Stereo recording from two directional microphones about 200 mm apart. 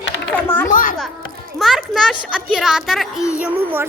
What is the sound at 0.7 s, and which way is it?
Speech, 40° left (ahead or behind).